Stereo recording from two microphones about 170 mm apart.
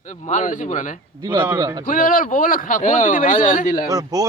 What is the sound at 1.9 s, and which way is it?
Speech, 55° left (ahead or behind).